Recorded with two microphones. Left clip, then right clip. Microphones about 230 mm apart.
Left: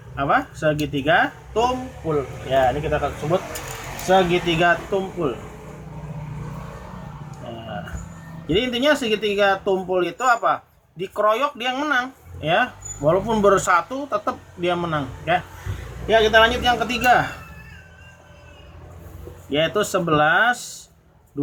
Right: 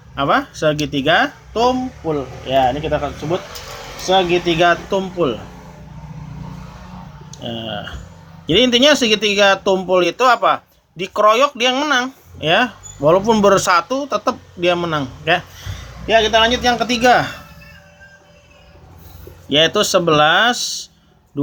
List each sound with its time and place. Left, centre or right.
0.2 s speech: right
2.5 s speech: right
4.1 s speech: right
8.4 s speech: right
19.5 s speech: right